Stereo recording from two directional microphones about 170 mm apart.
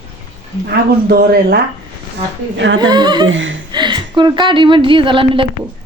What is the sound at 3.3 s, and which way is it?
Speech, 90° right.